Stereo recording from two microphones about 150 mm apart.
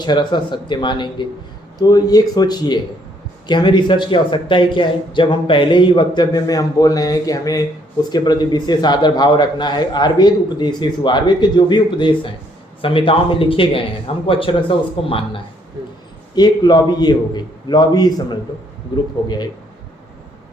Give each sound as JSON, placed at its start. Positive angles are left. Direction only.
{"t": 0.0, "sound": "a man's voice", "side_deg": 30}
{"t": 16.3, "sound": "a man's voice", "side_deg": 25}